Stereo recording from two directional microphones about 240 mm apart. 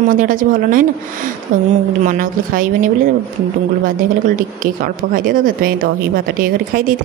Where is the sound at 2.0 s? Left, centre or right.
Right.